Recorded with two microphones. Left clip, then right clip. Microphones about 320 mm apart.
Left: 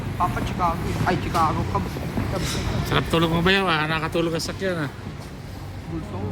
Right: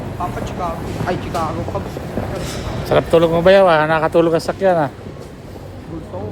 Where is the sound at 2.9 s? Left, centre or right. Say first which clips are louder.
Right 10 dB; centre.